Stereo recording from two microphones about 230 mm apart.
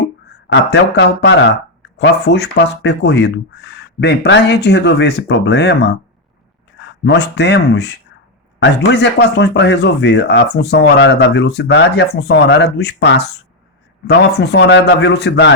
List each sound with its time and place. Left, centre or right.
0.5 s speech: left
7.0 s speech: left